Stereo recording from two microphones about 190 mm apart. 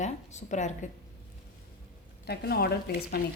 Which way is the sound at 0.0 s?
40° left (ahead or behind).